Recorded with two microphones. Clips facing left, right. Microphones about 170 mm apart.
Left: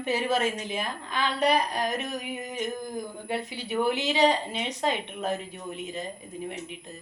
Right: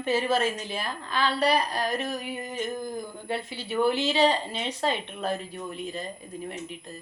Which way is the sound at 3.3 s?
15° left (ahead or behind).